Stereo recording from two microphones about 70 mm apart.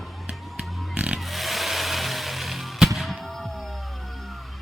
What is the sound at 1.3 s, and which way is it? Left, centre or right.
Music, centre.